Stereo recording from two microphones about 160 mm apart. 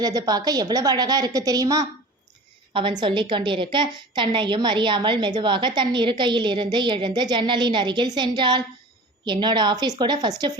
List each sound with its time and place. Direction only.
0.0 s a woman's voice: 25° right (ahead or behind)